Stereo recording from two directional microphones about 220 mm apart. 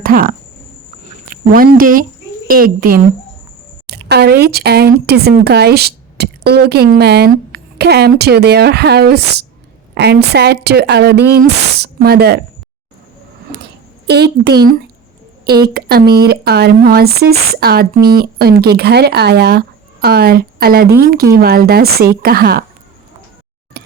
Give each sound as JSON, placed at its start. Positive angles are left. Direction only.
{"t": 0.0, "sound": "a woman's voice", "side_deg": -40}
{"t": 14.1, "sound": "speech", "side_deg": -50}
{"t": 15.4, "sound": "a woman's voice", "side_deg": -20}
{"t": 15.7, "sound": "speech", "side_deg": -45}
{"t": 23.8, "sound": "chink", "side_deg": -50}